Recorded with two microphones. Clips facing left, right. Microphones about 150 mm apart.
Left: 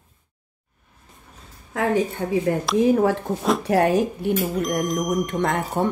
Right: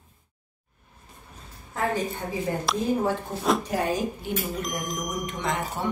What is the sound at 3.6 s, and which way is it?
Speech, 70° left (ahead or behind).